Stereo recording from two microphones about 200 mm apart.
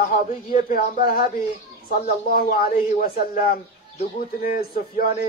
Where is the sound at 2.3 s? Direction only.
45° left (ahead or behind).